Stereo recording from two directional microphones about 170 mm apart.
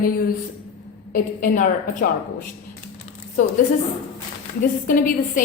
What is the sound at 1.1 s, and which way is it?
Speech, 55° left (ahead or behind).